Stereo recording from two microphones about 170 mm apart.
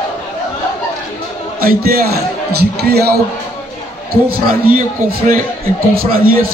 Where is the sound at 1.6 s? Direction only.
60° right (ahead or behind).